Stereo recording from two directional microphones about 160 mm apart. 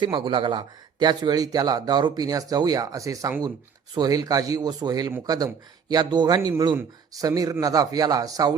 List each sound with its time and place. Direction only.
0.0 s speech: 30° right (ahead or behind)